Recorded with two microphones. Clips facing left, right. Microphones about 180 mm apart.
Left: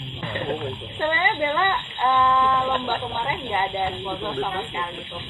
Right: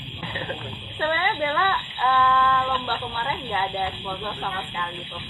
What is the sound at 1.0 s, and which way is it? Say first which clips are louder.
Speech: left 1 dB; 10° left (ahead or behind).